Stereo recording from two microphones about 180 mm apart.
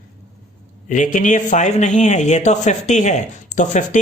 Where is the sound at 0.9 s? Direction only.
45° left (ahead or behind).